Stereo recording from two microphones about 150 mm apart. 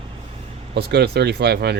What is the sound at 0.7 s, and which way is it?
Speech, 90° right.